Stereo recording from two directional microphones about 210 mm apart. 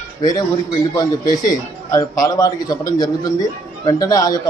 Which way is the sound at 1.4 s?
15° left (ahead or behind).